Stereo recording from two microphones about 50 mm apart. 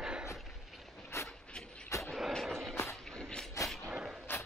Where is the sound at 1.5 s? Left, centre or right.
Centre.